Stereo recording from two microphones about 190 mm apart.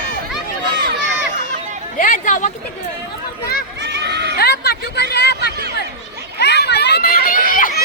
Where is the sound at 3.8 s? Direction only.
65° right (ahead or behind).